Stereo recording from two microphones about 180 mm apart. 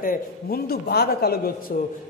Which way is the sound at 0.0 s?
55° left (ahead or behind).